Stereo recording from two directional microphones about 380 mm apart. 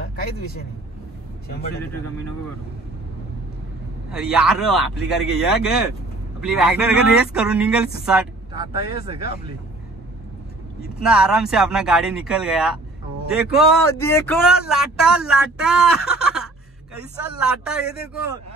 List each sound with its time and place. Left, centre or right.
0.0 s speech: left
4.1 s speech: centre
9.2 s speech: left
11.0 s speech: centre